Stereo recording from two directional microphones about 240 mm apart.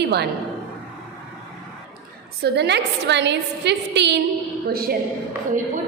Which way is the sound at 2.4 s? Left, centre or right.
Right.